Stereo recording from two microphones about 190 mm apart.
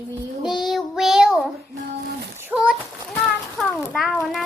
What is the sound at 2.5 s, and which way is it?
A child's voice, 5° right (ahead or behind).